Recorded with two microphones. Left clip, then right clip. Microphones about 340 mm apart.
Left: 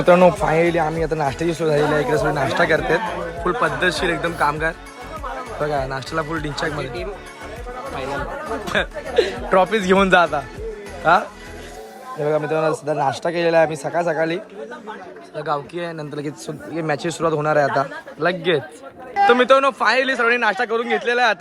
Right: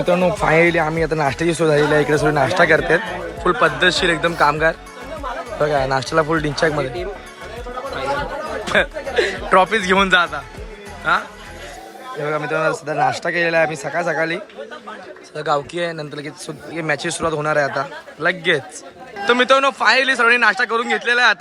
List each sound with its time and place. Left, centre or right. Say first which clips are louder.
0.3 s speech: right 2 dB; centre
8.6 s speech: right 6 dB; centre
12.2 s speech: even; centre